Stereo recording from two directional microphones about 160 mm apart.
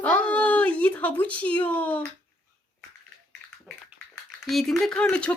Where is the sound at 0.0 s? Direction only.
10° left (ahead or behind).